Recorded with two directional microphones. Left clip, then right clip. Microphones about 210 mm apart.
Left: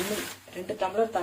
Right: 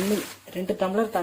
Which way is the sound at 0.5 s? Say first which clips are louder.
Right 4 dB; 50° right (ahead or behind).